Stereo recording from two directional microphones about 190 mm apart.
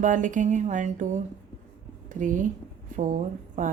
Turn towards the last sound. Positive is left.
turn(degrees=-45)  # may be behind; listen again after turning